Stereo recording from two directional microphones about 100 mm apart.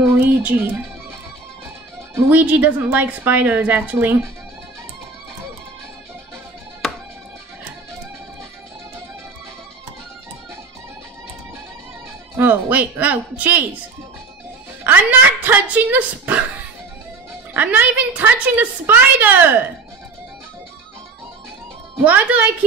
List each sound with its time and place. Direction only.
0.0 s speech: 20° right (ahead or behind)
2.1 s a woman's voice: 25° right (ahead or behind)
12.4 s a woman's voice: 20° right (ahead or behind)
14.8 s a woman's voice: 20° right (ahead or behind)
17.6 s a woman's voice: 15° right (ahead or behind)
21.9 s a woman's voice: 15° right (ahead or behind)